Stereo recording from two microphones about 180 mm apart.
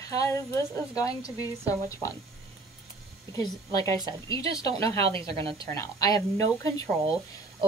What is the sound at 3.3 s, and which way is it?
A woman's voice, 20° left (ahead or behind).